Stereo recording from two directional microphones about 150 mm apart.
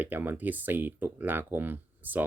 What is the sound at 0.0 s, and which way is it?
Speech, 15° right (ahead or behind).